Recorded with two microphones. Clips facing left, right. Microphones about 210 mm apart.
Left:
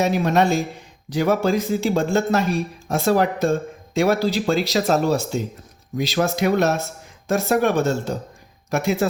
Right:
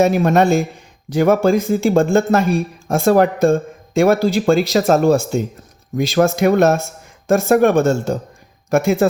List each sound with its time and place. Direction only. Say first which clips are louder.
0.0 s speech: right 5 dB; 50° right (ahead or behind)